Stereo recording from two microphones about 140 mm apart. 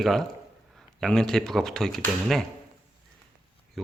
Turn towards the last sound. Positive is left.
turn(degrees=0)  # may be behind; listen again after turning